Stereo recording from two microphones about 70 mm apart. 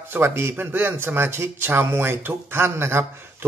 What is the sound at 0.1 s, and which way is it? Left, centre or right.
A man's voice, right.